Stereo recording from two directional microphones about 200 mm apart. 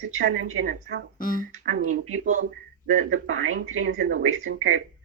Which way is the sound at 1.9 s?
90° right.